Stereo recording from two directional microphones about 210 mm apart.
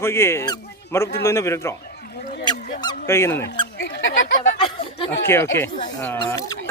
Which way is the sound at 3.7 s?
65° left (ahead or behind).